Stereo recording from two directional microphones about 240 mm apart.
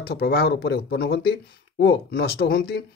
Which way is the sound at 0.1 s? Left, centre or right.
Left.